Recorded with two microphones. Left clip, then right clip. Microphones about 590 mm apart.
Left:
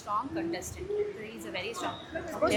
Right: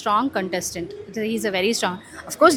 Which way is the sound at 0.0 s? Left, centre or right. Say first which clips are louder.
Right 12 dB; right.